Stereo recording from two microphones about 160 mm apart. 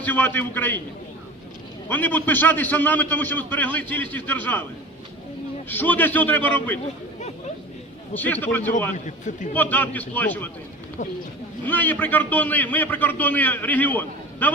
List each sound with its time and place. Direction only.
0.0 s a man's voice: 10° left (ahead or behind)
1.9 s a man's voice: 10° left (ahead or behind)
5.6 s a man's voice: 10° left (ahead or behind)
8.1 s a man's voice: 10° left (ahead or behind)
9.0 s a man's voice: 50° left (ahead or behind)
9.6 s a man's voice: 10° left (ahead or behind)
11.6 s a man's voice: 10° left (ahead or behind)